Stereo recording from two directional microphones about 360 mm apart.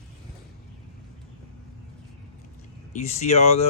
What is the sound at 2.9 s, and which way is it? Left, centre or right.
Speech, centre.